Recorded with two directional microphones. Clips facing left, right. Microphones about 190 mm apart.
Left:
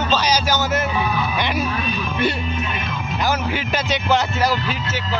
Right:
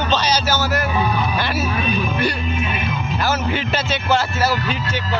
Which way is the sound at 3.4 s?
10° left (ahead or behind).